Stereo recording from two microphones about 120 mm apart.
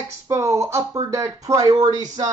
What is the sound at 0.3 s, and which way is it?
Speech, 25° right (ahead or behind).